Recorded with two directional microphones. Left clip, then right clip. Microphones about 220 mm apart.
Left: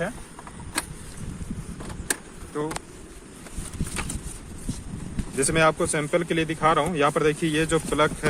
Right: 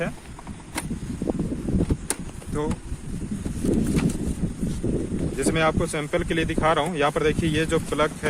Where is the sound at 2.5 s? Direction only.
20° right (ahead or behind).